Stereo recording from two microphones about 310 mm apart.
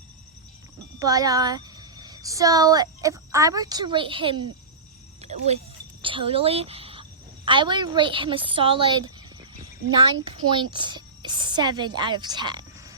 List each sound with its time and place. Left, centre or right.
0.9 s speech: centre
5.2 s a sound: right
7.4 s a woman's voice: centre
10.5 s speech: centre